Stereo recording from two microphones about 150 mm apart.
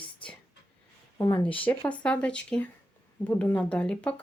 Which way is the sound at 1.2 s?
25° left (ahead or behind).